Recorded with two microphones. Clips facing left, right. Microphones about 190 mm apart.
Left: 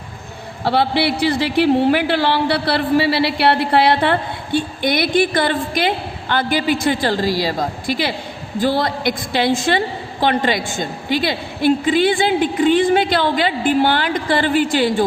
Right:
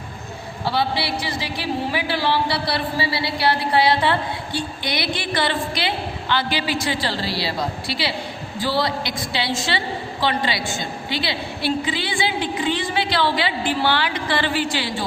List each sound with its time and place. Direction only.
0.6 s a woman's voice: 60° left (ahead or behind)